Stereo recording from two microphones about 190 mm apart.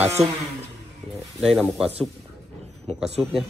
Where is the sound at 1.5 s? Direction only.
5° right (ahead or behind).